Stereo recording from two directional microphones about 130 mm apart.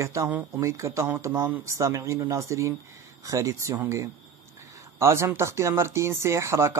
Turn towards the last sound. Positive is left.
turn(degrees=-20)  # may be behind; listen again after turning